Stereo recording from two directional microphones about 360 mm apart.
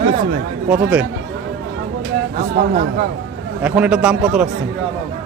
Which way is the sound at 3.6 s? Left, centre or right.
Centre.